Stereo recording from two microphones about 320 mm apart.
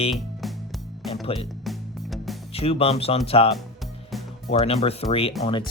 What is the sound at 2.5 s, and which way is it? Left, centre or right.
Speech, centre.